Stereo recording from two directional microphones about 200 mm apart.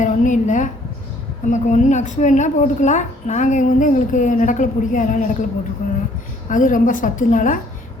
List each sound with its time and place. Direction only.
0.0 s a woman's voice: 40° left (ahead or behind)
6.5 s a woman's voice: 40° left (ahead or behind)